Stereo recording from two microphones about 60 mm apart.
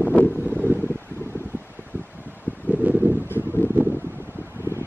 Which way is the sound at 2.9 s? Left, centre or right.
Right.